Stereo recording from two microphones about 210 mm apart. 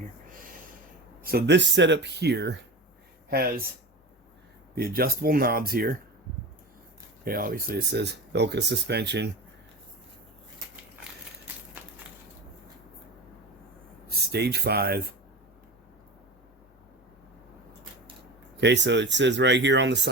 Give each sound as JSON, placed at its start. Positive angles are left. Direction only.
{"t": 1.2, "sound": "speech", "side_deg": -45}
{"t": 4.7, "sound": "speech", "side_deg": -45}
{"t": 7.3, "sound": "speech", "side_deg": -45}
{"t": 11.5, "sound": "a sound", "side_deg": -10}
{"t": 14.2, "sound": "speech", "side_deg": -50}
{"t": 18.5, "sound": "speech", "side_deg": -55}